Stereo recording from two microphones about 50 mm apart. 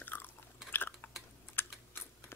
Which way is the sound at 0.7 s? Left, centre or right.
Left.